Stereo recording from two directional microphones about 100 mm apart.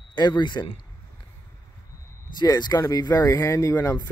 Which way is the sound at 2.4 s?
45° left (ahead or behind).